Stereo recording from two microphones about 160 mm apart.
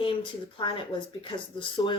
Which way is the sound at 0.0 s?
30° left (ahead or behind).